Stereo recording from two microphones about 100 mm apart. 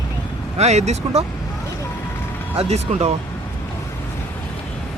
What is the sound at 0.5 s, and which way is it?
Speech, 90° right.